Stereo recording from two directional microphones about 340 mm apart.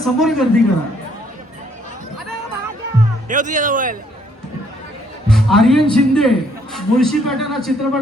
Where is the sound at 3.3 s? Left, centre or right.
Right.